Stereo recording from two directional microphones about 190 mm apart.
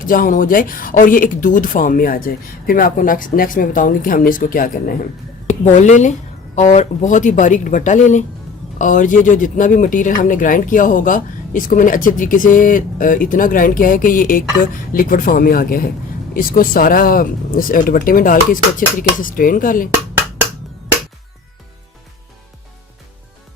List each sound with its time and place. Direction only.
0.0 s speech: 45° left (ahead or behind)